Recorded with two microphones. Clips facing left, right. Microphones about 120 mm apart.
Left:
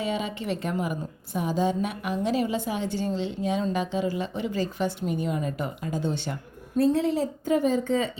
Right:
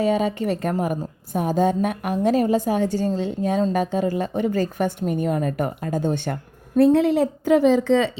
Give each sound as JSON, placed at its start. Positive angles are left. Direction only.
{"t": 0.0, "sound": "a woman's voice", "side_deg": -45}